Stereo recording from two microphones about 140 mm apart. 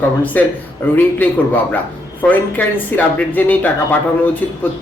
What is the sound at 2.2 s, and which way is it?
Speech, 10° left (ahead or behind).